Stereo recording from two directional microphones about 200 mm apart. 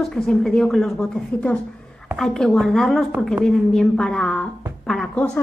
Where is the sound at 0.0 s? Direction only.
Centre (ahead or behind).